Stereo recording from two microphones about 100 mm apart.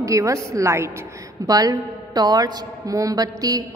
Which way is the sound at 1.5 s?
40° right (ahead or behind).